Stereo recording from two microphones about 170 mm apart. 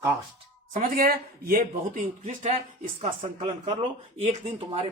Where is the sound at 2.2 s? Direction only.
45° right (ahead or behind).